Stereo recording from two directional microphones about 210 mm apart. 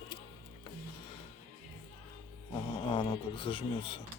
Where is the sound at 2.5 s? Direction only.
25° left (ahead or behind).